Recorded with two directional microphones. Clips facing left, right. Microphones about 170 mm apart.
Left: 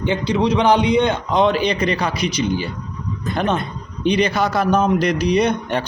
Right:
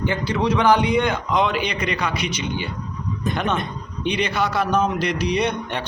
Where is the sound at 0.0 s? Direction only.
20° left (ahead or behind).